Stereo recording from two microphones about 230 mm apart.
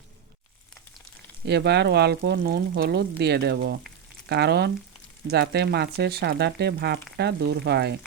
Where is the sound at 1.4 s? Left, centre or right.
Right.